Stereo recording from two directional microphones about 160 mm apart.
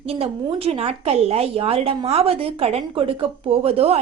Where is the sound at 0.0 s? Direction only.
35° right (ahead or behind).